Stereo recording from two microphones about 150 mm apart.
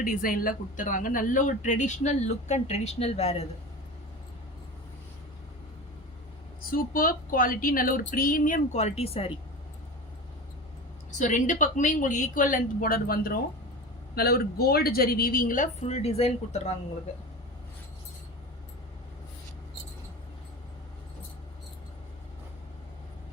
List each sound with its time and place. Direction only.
0.0 s speech: 70° left (ahead or behind); by 3.4 s 45° left (ahead or behind)
6.6 s speech: 70° left (ahead or behind); by 9.3 s 40° left (ahead or behind)
11.2 s speech: 55° left (ahead or behind); by 13.4 s 75° left (ahead or behind)
14.2 s speech: 90° left; by 16.7 s 45° left (ahead or behind)